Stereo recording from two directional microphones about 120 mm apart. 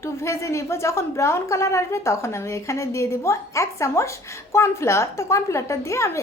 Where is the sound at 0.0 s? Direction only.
25° left (ahead or behind).